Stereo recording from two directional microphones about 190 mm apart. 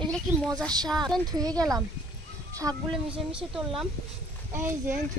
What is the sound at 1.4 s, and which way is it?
Speech, 20° right (ahead or behind).